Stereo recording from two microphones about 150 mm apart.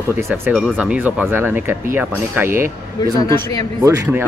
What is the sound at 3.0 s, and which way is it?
Speech, 30° left (ahead or behind).